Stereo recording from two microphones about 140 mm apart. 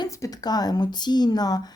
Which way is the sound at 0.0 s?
30° left (ahead or behind).